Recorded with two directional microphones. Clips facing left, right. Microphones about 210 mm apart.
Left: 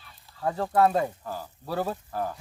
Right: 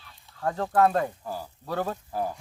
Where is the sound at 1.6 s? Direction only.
10° left (ahead or behind).